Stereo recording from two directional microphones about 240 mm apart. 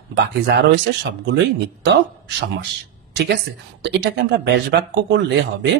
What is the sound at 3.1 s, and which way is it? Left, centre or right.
Speech, right.